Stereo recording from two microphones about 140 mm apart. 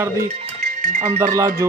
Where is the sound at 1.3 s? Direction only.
20° right (ahead or behind).